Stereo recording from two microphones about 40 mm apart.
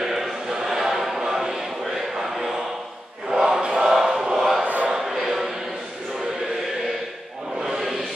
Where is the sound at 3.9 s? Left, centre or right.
Centre.